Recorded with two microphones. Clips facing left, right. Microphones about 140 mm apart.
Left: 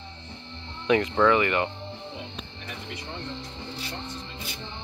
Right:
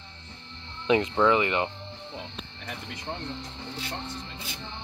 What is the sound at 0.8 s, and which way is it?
Speech, 25° right (ahead or behind).